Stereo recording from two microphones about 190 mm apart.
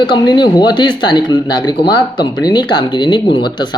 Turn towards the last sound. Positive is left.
turn(degrees=25)  # may be behind; listen again after turning